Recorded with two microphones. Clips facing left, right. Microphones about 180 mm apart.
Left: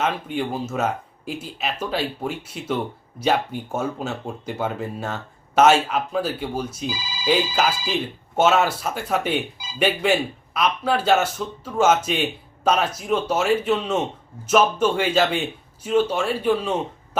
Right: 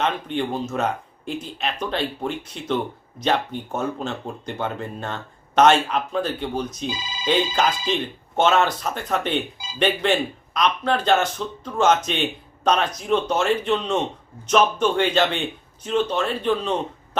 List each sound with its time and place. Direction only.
0.0 s speech: 5° left (ahead or behind)
6.9 s speech: 25° right (ahead or behind)
7.3 s speech: 5° left (ahead or behind)